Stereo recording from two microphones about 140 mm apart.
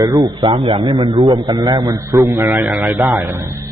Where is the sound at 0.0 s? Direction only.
25° right (ahead or behind); by 1.4 s 40° right (ahead or behind).